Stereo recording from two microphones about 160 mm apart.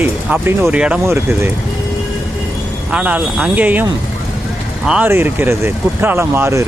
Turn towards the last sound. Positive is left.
turn(degrees=-15)  # may be behind; listen again after turning